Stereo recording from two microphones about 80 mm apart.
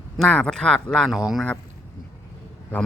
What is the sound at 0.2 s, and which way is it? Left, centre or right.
Speech, centre.